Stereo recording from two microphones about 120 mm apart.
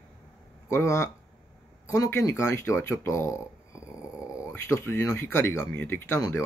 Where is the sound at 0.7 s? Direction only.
25° left (ahead or behind).